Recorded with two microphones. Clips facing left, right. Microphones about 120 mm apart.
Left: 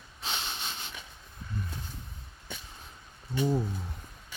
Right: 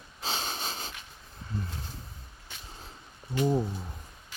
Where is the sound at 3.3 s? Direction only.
15° right (ahead or behind).